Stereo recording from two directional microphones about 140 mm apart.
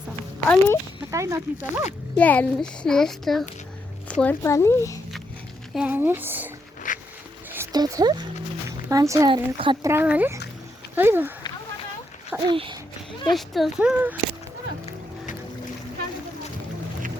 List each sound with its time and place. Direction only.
0.4 s speech: 10° left (ahead or behind)
1.1 s speech: 20° right (ahead or behind)
2.1 s a child's voice: 10° left (ahead or behind)
5.7 s speech: 10° right (ahead or behind)
6.8 s a sound: 70° left (ahead or behind)
7.7 s speech: 25° right (ahead or behind)
9.3 s speech: 35° right (ahead or behind)
9.8 s speech: 15° right (ahead or behind)
12.5 s speech: 35° right (ahead or behind)
13.3 s a child's voice: centre (ahead or behind)